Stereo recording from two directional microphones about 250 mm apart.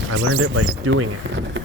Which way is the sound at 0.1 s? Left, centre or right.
Right.